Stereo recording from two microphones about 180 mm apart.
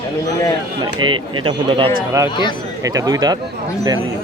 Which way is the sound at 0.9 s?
25° right (ahead or behind).